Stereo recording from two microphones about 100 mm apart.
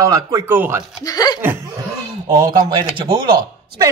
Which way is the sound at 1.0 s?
40° left (ahead or behind).